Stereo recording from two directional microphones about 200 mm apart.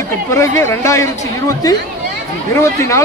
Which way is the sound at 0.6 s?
15° left (ahead or behind).